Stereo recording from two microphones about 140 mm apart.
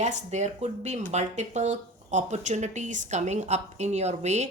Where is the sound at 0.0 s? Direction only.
55° right (ahead or behind).